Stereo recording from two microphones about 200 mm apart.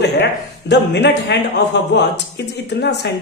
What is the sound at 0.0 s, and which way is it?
Speech, 60° left (ahead or behind).